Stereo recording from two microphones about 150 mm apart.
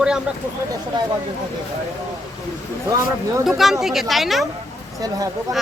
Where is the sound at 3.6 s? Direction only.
Centre (ahead or behind).